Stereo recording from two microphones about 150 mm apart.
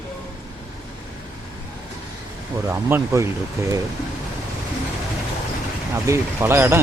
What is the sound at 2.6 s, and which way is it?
Speech, 20° right (ahead or behind).